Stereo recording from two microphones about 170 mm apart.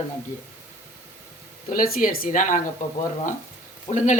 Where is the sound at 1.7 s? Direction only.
55° left (ahead or behind).